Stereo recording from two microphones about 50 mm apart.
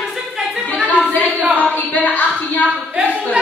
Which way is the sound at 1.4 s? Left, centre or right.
Right.